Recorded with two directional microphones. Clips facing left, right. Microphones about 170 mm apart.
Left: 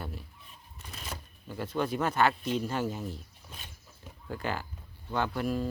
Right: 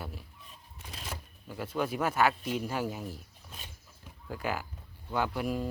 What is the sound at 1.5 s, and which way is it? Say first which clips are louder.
Speech: left 1 dB; 5° right (ahead or behind).